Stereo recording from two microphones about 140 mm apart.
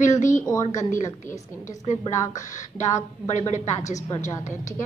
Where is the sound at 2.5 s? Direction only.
60° left (ahead or behind).